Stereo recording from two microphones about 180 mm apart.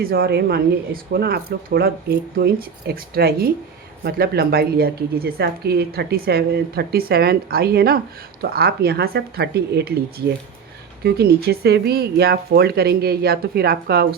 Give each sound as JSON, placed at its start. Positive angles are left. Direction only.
{"t": 0.0, "sound": "a woman's voice", "side_deg": -55}
{"t": 11.0, "sound": "a woman's voice", "side_deg": -60}